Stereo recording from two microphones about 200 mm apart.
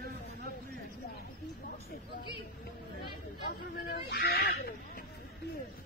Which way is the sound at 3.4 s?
50° left (ahead or behind).